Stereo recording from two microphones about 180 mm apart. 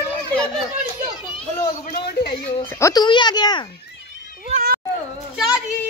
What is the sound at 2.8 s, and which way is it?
Speech, 20° left (ahead or behind).